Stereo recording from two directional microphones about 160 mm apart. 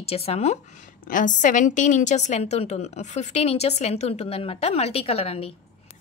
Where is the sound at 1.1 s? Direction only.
55° left (ahead or behind); by 5.5 s 35° left (ahead or behind).